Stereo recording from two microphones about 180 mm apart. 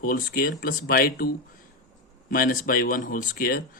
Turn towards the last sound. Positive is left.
turn(degrees=55)  # may be behind; listen again after turning